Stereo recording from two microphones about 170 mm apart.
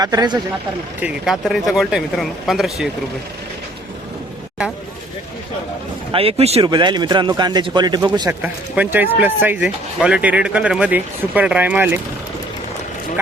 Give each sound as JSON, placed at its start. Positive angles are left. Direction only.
{"t": 0.0, "sound": "a man's voice", "side_deg": -25}
{"t": 1.0, "sound": "speech", "side_deg": 0}
{"t": 6.1, "sound": "speech", "side_deg": -35}
{"t": 6.7, "sound": "a man's voice", "side_deg": -25}
{"t": 8.4, "sound": "speech", "side_deg": -10}